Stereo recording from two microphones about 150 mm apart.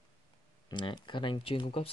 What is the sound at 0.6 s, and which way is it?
Speech, 30° left (ahead or behind).